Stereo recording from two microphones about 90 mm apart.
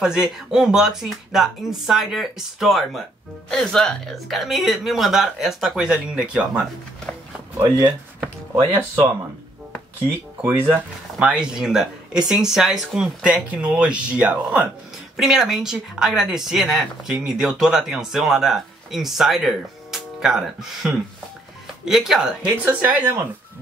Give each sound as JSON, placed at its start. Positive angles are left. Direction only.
{"t": 0.0, "sound": "speech", "side_deg": -10}
{"t": 8.7, "sound": "speech", "side_deg": -25}
{"t": 10.7, "sound": "speech", "side_deg": -15}
{"t": 22.7, "sound": "speech", "side_deg": -20}